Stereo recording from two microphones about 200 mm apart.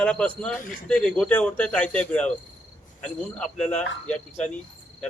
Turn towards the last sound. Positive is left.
turn(degrees=5)  # may be behind; listen again after turning